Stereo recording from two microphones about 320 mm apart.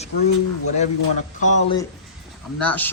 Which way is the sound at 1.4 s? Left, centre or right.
Left.